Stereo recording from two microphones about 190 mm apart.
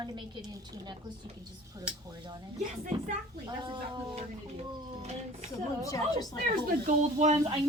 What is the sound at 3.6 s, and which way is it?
A woman's voice, 25° right (ahead or behind).